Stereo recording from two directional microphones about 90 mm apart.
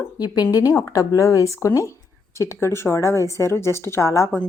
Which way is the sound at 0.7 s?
35° left (ahead or behind).